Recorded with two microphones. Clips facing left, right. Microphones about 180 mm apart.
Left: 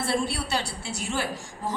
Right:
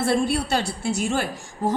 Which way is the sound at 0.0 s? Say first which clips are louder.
Right 6 dB; 50° right (ahead or behind).